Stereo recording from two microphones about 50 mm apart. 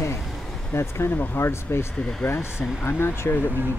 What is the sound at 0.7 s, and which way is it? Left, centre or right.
Speech, left.